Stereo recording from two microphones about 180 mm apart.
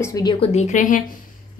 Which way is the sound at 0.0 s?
20° left (ahead or behind).